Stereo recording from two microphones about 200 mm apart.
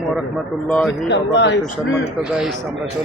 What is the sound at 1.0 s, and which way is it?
Speech, 60° left (ahead or behind).